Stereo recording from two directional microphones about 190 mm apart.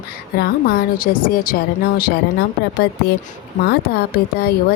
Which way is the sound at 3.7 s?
55° left (ahead or behind).